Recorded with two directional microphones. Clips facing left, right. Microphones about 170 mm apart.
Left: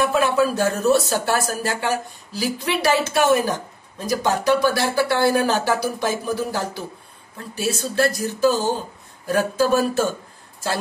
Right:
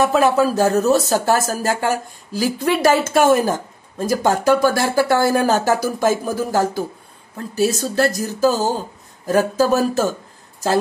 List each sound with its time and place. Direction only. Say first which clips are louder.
0.0 s a woman's voice: right 3 dB; 40° right (ahead or behind)